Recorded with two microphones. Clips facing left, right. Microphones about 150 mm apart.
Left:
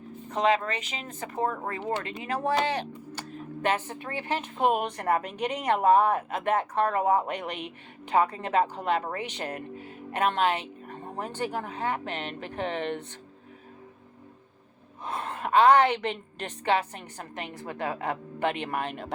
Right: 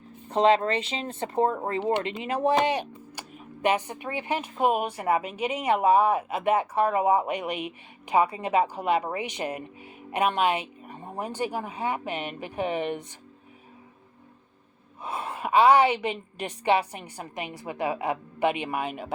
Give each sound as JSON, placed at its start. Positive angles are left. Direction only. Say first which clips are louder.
{"t": 0.3, "sound": "speech", "louder": "right 4 dB", "side_deg": -30}
{"t": 15.0, "sound": "speech", "louder": "right 1 dB", "side_deg": -10}